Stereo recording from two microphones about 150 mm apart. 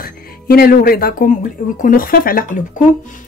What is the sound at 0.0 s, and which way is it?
Speech, 80° left.